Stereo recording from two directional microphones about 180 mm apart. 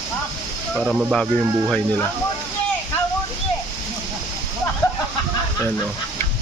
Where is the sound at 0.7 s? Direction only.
5° right (ahead or behind).